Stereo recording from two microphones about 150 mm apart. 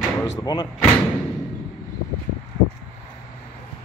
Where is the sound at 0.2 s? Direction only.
25° left (ahead or behind).